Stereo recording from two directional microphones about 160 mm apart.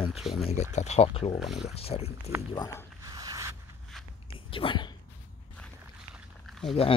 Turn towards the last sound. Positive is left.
turn(degrees=0)  # may be behind; listen again after turning